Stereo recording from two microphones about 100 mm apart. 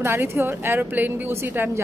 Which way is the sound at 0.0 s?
25° right (ahead or behind).